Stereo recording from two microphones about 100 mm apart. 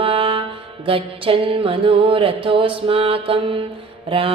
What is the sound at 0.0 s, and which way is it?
Mantra, 65° right (ahead or behind).